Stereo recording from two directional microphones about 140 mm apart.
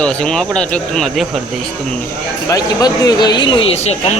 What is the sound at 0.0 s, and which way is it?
Speech, 5° left (ahead or behind).